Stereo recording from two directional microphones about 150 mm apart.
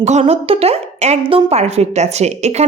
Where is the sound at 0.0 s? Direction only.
50° right (ahead or behind).